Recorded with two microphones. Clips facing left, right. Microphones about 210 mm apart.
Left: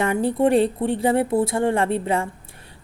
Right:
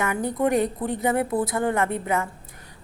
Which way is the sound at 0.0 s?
30° left (ahead or behind).